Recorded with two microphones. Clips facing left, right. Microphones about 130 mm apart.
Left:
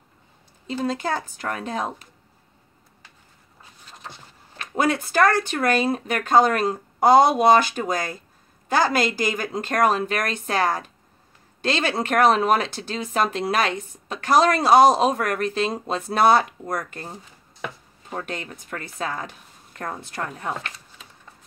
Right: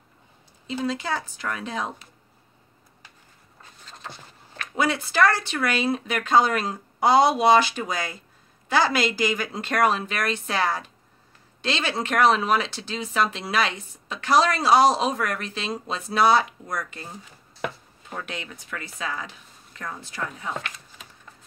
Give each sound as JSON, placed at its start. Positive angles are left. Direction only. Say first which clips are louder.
{"t": 0.8, "sound": "speech", "louder": "left 2 dB", "side_deg": 45}
{"t": 4.0, "sound": "a sound", "louder": "right 1 dB", "side_deg": 15}
{"t": 4.7, "sound": "speech", "louder": "left 2 dB", "side_deg": 45}
{"t": 18.1, "sound": "speech", "louder": "left 3 dB", "side_deg": 45}